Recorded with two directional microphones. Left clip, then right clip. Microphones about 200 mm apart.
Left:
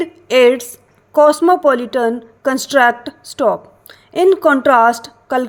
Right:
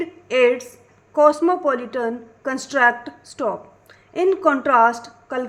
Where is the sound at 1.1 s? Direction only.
30° left (ahead or behind).